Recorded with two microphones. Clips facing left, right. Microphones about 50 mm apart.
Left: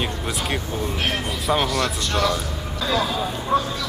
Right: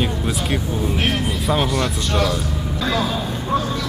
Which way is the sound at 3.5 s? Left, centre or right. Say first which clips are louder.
Left 1 dB; left.